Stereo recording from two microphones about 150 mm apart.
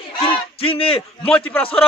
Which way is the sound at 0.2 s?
40° left (ahead or behind).